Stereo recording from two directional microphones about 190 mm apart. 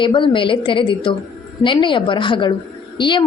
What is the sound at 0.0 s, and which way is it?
A woman's voice, 25° left (ahead or behind).